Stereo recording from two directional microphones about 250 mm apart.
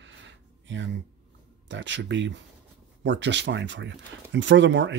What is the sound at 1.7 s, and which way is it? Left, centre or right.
Speech, right.